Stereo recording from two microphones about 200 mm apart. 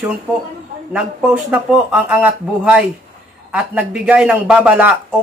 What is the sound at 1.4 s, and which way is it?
Speech, 5° right (ahead or behind).